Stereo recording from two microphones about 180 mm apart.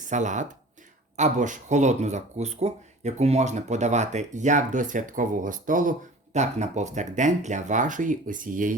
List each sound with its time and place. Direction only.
0.1 s speech: 45° right (ahead or behind)